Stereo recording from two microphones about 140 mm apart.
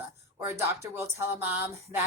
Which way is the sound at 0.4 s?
20° right (ahead or behind).